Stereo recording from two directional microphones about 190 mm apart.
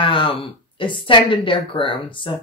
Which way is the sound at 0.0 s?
25° left (ahead or behind).